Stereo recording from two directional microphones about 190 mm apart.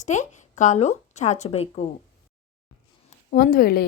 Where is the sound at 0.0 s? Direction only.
40° left (ahead or behind).